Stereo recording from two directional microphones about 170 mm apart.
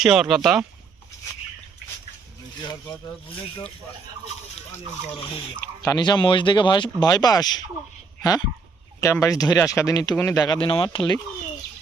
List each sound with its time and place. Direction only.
0.0 s speech: centre (ahead or behind)
5.5 s speech: 15° left (ahead or behind)